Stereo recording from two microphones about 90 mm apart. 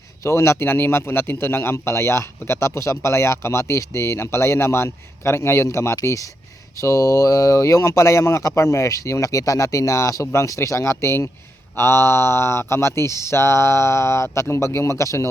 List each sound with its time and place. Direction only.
0.2 s a man's voice: 35° left (ahead or behind)